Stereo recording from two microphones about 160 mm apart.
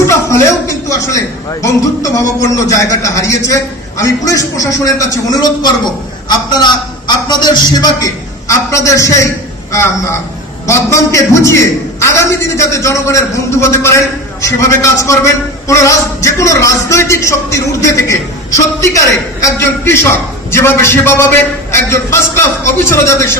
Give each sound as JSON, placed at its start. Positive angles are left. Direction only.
{"t": 0.0, "sound": "a man's voice", "side_deg": 20}